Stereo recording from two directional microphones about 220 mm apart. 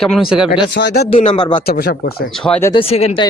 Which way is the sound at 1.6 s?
45° left (ahead or behind).